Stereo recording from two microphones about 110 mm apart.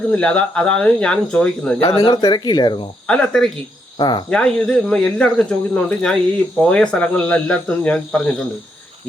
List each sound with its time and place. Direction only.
0.1 s speech: 10° left (ahead or behind)
1.8 s speech: 55° left (ahead or behind)
2.2 s speech: 40° left (ahead or behind)
3.1 s speech: 5° left (ahead or behind)
3.9 s cricket: 40° left (ahead or behind)
4.3 s speech: 10° left (ahead or behind)